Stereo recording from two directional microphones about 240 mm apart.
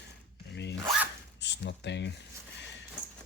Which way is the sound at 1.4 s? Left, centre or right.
Left.